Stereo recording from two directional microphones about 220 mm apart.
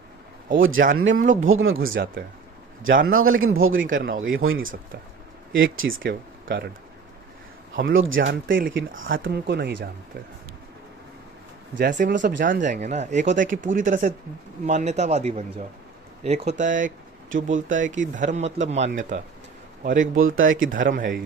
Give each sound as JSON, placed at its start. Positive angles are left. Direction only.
{"t": 0.8, "sound": "speech", "side_deg": -40}
{"t": 1.5, "sound": "speech", "side_deg": -65}
{"t": 1.9, "sound": "speech", "side_deg": -45}
{"t": 2.8, "sound": "speech", "side_deg": -60}
{"t": 3.8, "sound": "speech", "side_deg": -40}
{"t": 4.4, "sound": "speech", "side_deg": -75}
{"t": 6.1, "sound": "speech", "side_deg": -40}
{"t": 8.1, "sound": "speech", "side_deg": -55}
{"t": 11.8, "sound": "speech", "side_deg": -40}
{"t": 17.2, "sound": "speech", "side_deg": -60}
{"t": 17.7, "sound": "a man's voice", "side_deg": -35}
{"t": 20.3, "sound": "speech", "side_deg": -65}
{"t": 20.7, "sound": "speech", "side_deg": -40}